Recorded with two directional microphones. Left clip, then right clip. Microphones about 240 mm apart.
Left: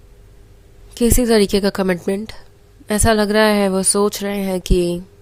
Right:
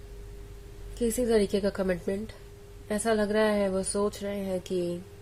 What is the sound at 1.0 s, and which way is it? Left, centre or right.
Speech, left.